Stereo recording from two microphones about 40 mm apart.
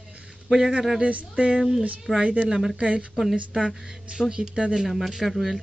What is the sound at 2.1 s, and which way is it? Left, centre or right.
Speech, right.